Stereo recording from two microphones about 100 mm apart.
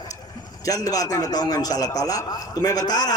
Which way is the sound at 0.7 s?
35° left (ahead or behind).